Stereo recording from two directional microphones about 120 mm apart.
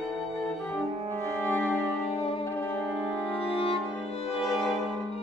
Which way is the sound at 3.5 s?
50° left (ahead or behind).